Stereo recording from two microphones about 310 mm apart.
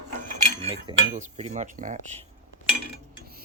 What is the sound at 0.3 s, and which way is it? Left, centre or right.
Cutlery, right.